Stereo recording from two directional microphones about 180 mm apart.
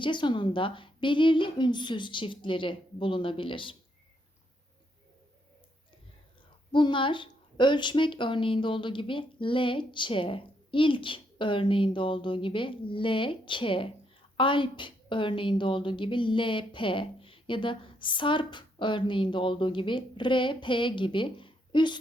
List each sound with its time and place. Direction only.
0.0 s a woman's voice: 25° left (ahead or behind)
6.7 s a woman's voice: 25° left (ahead or behind)